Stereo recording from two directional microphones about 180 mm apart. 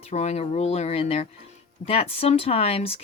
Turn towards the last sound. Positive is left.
turn(degrees=35)  # may be behind; listen again after turning